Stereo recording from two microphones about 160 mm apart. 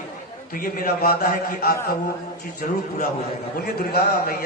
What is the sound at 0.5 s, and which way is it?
A man's voice, 60° left (ahead or behind).